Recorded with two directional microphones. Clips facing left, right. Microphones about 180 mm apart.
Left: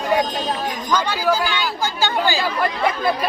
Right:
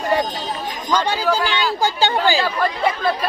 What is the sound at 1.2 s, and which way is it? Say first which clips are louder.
Speech: even; 10° left (ahead or behind).